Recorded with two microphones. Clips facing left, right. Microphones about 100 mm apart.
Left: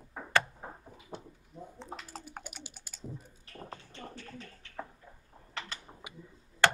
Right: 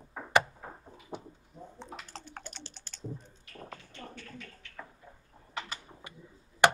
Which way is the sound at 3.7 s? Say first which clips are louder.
Left 1 dB; 35° left (ahead or behind).